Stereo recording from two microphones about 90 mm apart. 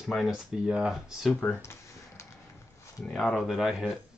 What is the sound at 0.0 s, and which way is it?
Speech, 5° right (ahead or behind).